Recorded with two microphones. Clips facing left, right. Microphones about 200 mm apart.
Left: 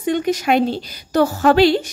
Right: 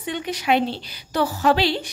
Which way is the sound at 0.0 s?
45° left (ahead or behind).